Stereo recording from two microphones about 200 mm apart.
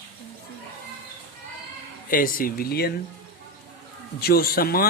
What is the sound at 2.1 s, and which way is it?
Speech, 45° left (ahead or behind).